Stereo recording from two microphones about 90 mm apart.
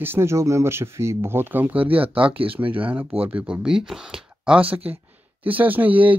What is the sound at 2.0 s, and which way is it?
Speech, 85° right.